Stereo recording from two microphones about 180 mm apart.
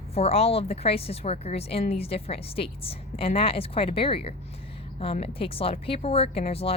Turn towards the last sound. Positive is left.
turn(degrees=35)  # may be behind; listen again after turning